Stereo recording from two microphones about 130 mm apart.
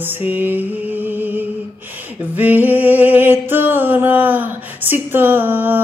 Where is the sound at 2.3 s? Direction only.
15° right (ahead or behind).